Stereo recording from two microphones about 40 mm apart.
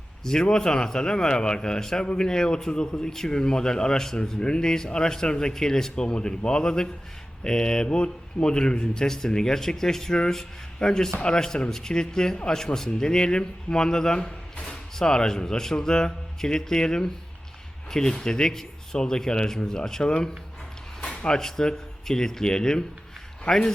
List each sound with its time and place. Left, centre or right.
0.3 s a man's voice: centre
9.0 s a man's voice: centre
21.3 s a man's voice: centre